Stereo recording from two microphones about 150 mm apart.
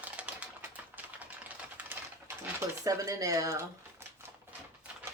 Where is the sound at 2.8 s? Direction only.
20° right (ahead or behind).